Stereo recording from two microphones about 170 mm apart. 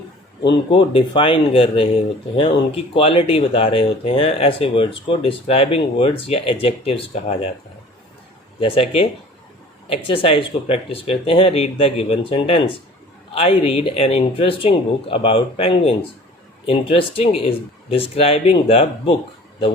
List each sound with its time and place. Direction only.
0.4 s speech: 30° left (ahead or behind)
8.6 s speech: 35° left (ahead or behind)